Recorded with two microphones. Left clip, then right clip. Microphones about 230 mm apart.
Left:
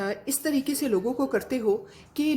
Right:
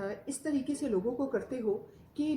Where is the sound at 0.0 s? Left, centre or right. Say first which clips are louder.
Left 8 dB; left.